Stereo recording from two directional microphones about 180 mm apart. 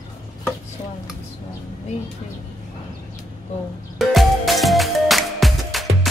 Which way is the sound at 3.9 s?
Centre (ahead or behind).